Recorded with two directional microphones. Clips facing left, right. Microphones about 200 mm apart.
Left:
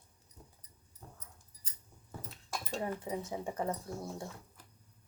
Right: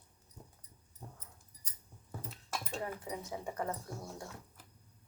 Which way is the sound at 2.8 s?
25° left (ahead or behind).